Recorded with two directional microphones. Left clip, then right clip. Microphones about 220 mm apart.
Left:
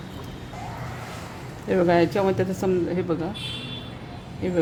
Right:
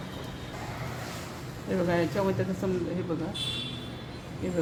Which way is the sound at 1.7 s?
40° left (ahead or behind).